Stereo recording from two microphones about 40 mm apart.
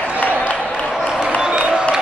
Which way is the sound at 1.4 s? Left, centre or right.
Right.